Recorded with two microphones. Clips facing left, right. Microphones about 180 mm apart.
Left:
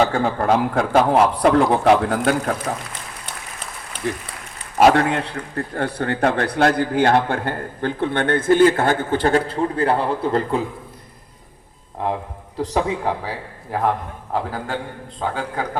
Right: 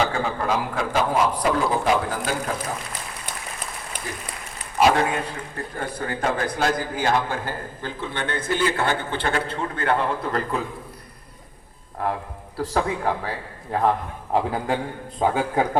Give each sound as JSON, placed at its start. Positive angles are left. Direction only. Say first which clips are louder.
{"t": 0.1, "sound": "a man's voice", "louder": "left 6 dB", "side_deg": 50}
{"t": 4.8, "sound": "a man's voice", "louder": "left 4 dB", "side_deg": 65}
{"t": 12.5, "sound": "a man's voice", "louder": "left 3 dB", "side_deg": 15}
{"t": 15.2, "sound": "a man's voice", "louder": "right 4 dB", "side_deg": -20}